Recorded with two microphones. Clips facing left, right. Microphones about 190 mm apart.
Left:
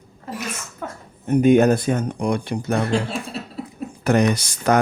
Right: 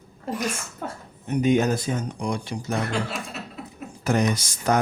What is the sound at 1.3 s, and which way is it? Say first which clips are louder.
Speech: left 6 dB; 55° left (ahead or behind).